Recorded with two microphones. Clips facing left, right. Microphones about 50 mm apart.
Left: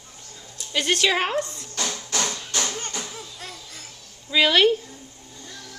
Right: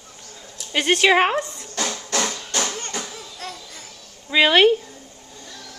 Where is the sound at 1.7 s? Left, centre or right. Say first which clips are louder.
Right 3 dB; right.